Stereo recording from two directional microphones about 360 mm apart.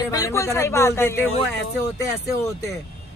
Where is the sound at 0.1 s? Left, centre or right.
Centre.